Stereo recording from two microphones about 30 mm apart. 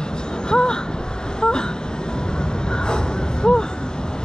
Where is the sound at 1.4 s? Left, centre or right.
Left.